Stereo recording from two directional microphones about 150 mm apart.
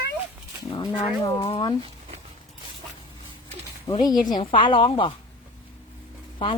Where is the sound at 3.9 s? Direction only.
30° left (ahead or behind).